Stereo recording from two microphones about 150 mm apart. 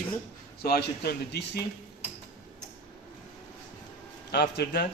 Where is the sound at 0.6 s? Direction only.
90° left.